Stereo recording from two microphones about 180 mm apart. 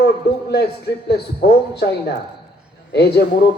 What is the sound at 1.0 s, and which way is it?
A man's voice, 60° left (ahead or behind).